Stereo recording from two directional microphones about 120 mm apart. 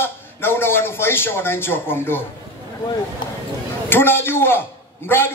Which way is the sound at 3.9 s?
20° left (ahead or behind).